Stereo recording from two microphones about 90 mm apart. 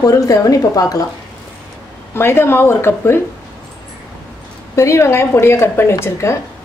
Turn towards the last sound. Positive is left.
turn(degrees=30)  # may be behind; listen again after turning